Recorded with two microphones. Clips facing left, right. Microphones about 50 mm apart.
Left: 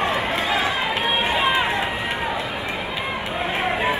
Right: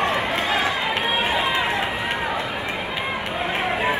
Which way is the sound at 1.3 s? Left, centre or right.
Left.